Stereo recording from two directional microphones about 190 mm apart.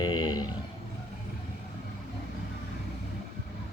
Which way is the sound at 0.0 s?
20° left (ahead or behind).